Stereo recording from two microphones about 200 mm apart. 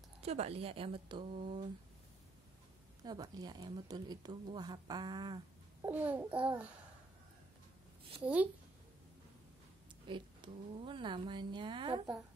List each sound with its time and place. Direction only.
0.2 s a woman's voice: 30° right (ahead or behind)
3.0 s a woman's voice: 20° right (ahead or behind)
5.9 s a child's voice: 10° right (ahead or behind)
8.2 s a child's voice: 5° right (ahead or behind)
10.0 s a woman's voice: 25° right (ahead or behind)